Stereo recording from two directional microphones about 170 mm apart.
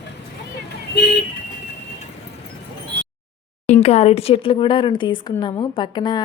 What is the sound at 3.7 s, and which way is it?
A woman's voice, 40° left (ahead or behind).